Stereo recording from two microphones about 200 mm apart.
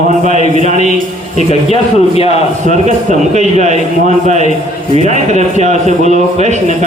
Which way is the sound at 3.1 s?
35° right (ahead or behind).